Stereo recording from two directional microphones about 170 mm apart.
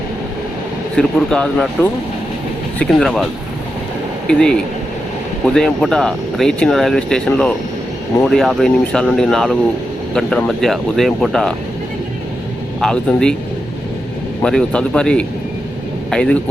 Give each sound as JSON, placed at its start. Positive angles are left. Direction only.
{"t": 0.9, "sound": "speech", "side_deg": 5}
{"t": 4.3, "sound": "speech", "side_deg": 5}
{"t": 5.5, "sound": "speech", "side_deg": 5}
{"t": 12.8, "sound": "speech", "side_deg": 5}
{"t": 14.4, "sound": "speech", "side_deg": 5}